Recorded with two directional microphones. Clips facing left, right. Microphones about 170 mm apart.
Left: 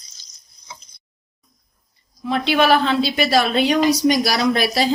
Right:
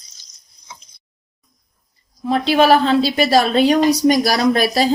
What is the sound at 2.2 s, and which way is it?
A woman's voice, 35° right (ahead or behind).